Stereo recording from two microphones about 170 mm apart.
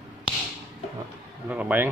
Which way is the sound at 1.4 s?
10° right (ahead or behind).